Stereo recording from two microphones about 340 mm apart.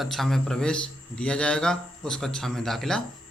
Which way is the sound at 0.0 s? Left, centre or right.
Centre.